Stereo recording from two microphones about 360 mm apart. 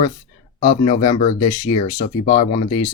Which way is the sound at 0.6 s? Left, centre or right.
Left.